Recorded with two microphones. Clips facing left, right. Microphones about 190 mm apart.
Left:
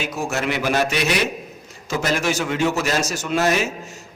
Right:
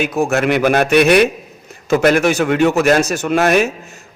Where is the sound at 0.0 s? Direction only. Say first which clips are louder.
Right 8 dB; 60° right (ahead or behind).